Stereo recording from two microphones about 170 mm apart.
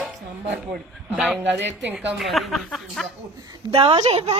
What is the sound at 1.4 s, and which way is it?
Speech, 90° right.